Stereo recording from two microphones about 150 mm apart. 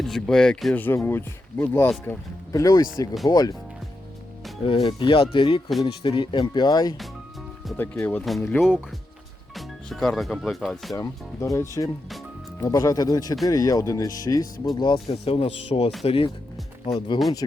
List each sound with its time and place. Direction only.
0.0 s speech: 5° left (ahead or behind); by 3.5 s 25° left (ahead or behind)
4.6 s speech: 35° left (ahead or behind)
7.8 s speech: 10° left (ahead or behind)
8.2 s speech: centre (ahead or behind)
9.6 s speech: centre (ahead or behind)
10.9 s speech: 20° left (ahead or behind)
15.1 s speech: 45° left (ahead or behind)